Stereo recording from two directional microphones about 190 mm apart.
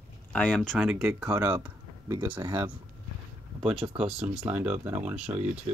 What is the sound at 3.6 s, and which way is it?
Speech, 30° right (ahead or behind).